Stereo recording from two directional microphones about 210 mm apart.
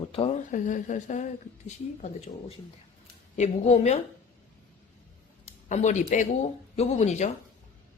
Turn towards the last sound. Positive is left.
turn(degrees=35)  # may be behind; listen again after turning